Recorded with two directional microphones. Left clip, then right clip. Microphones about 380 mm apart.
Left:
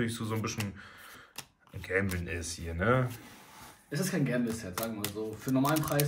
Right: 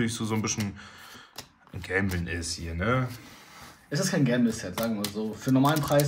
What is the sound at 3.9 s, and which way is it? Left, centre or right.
Speech, centre.